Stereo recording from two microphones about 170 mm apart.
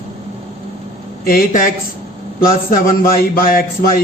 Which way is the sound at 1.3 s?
55° left (ahead or behind).